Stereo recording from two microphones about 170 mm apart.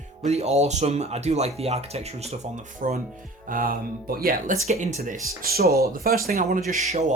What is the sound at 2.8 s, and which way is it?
Speech, 50° right (ahead or behind).